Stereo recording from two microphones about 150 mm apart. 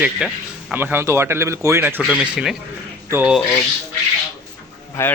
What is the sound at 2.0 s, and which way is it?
A man's voice, 5° right (ahead or behind).